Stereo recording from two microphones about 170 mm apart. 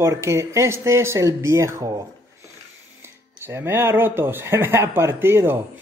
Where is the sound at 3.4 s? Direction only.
15° right (ahead or behind).